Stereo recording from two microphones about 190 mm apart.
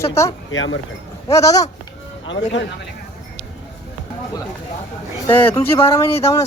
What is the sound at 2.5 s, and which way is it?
Speech, 65° left (ahead or behind).